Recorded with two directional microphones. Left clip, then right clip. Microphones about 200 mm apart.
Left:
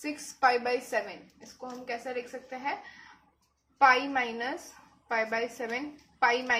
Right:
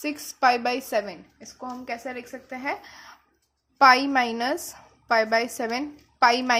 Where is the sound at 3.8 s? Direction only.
50° right (ahead or behind).